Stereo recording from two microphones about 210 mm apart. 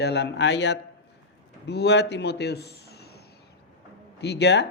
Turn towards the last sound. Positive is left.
turn(degrees=55)  # may be behind; listen again after turning